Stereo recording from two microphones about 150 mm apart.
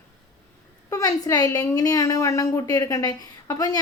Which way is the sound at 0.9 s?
25° left (ahead or behind).